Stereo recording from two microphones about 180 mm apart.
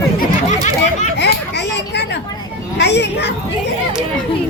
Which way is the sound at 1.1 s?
70° left (ahead or behind).